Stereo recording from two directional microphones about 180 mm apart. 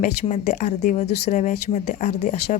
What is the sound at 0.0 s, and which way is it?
Speech, 40° left (ahead or behind).